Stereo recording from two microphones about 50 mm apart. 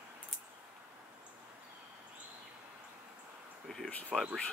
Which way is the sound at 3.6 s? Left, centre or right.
Centre.